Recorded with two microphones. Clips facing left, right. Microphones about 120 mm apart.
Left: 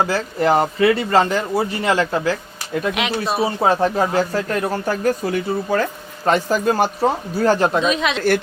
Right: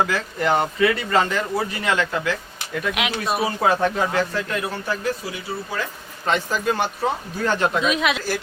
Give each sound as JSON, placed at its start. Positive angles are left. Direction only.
{"t": 0.0, "sound": "speech", "side_deg": 35}
{"t": 7.8, "sound": "a woman's voice", "side_deg": -5}